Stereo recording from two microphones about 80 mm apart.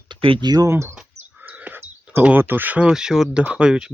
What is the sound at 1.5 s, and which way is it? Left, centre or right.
Speech, right.